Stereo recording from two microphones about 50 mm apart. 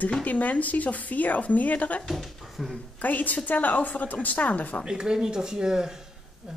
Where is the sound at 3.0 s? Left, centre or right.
Left.